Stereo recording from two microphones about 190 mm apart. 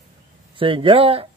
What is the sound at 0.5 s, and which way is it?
Speech, 30° right (ahead or behind).